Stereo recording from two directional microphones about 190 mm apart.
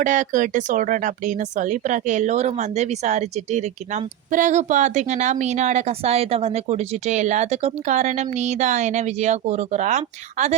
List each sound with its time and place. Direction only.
0.0 s speech: 40° right (ahead or behind)